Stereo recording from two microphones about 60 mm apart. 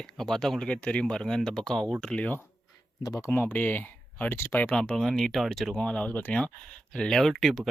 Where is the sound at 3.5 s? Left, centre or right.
Left.